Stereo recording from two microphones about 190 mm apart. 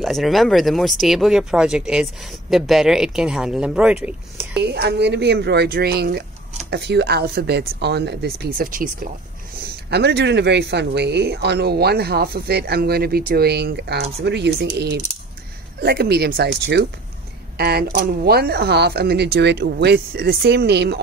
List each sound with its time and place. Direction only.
0.0 s speech: centre (ahead or behind)
4.6 s speech: 60° right (ahead or behind)
9.8 s speech: 60° right (ahead or behind)